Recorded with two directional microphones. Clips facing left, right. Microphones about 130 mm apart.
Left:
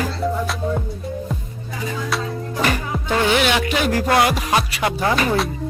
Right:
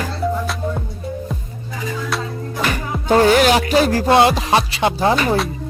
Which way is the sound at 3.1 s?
40° right (ahead or behind).